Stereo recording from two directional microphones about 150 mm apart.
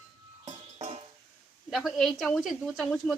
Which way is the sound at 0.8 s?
45° right (ahead or behind).